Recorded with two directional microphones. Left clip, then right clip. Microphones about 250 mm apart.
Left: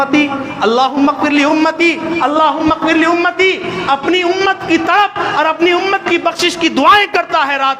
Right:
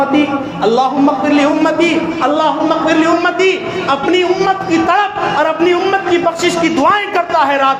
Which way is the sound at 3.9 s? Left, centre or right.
Left.